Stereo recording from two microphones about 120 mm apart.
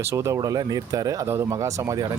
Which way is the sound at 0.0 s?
25° right (ahead or behind).